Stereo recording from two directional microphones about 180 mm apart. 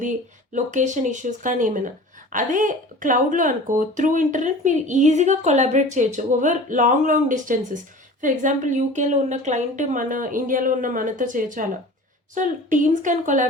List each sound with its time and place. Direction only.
0.5 s speech: 45° right (ahead or behind)